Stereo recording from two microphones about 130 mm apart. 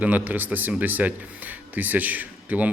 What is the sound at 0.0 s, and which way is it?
Speech, 10° right (ahead or behind).